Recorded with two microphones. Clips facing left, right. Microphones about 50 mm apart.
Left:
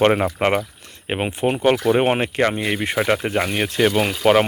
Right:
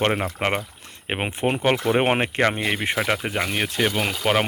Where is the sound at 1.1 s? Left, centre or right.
Right.